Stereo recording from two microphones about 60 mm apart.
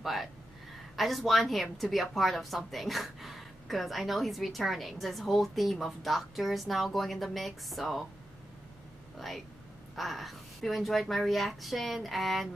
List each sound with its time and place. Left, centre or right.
0.0 s a woman's voice: centre
9.9 s a woman's voice: centre